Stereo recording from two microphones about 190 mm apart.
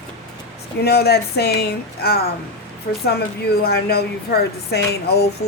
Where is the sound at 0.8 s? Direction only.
55° left (ahead or behind).